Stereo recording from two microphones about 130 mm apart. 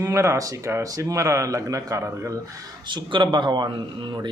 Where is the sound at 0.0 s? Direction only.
20° right (ahead or behind).